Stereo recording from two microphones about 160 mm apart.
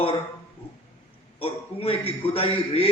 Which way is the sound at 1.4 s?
35° left (ahead or behind).